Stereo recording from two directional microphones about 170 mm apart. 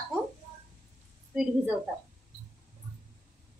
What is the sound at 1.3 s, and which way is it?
Speech, 5° right (ahead or behind).